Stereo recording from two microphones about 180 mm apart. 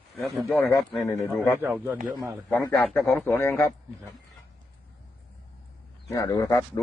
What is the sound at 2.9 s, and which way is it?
Speech, 5° left (ahead or behind).